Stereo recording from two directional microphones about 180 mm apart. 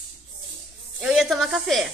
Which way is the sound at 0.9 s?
5° right (ahead or behind).